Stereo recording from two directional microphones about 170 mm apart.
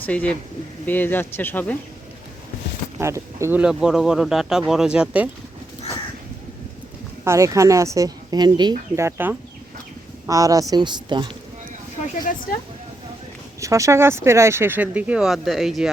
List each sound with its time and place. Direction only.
0.0 s speech: 10° left (ahead or behind)
3.0 s speech: 15° right (ahead or behind)
7.3 s a woman's voice: 20° right (ahead or behind)
13.6 s speech: 20° right (ahead or behind); by 15.9 s centre (ahead or behind)